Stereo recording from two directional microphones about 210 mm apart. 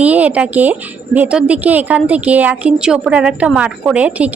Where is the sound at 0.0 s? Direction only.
5° right (ahead or behind).